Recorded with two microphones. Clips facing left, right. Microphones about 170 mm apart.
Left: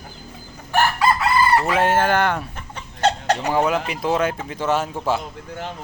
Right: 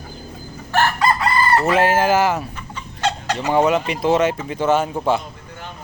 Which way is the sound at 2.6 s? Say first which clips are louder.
Left 2 dB; 55° left (ahead or behind).